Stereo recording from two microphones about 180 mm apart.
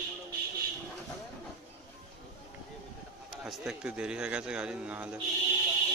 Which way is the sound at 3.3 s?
Centre (ahead or behind).